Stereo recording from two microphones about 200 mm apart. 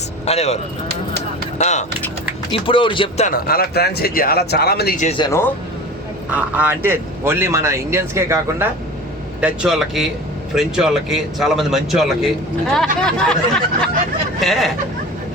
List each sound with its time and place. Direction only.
0.3 s speech: 30° left (ahead or behind)
3.2 s speech: 45° left (ahead or behind)
5.0 s speech: 25° left (ahead or behind)
6.3 s speech: 10° right (ahead or behind)